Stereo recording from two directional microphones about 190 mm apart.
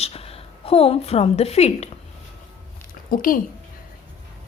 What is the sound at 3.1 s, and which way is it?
Speech, 50° left (ahead or behind).